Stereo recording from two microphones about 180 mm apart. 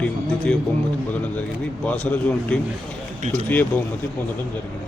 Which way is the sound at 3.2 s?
45° right (ahead or behind).